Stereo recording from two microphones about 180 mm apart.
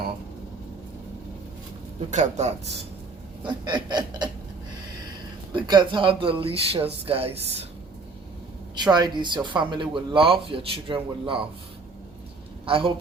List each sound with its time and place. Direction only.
2.0 s speech: 40° right (ahead or behind)
3.4 s a man's voice: 25° right (ahead or behind)
5.5 s a man's voice: 25° right (ahead or behind)
8.7 s a man's voice: 25° right (ahead or behind)
12.6 s speech: 30° right (ahead or behind)